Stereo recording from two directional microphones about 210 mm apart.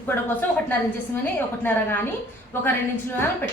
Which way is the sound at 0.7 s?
10° left (ahead or behind).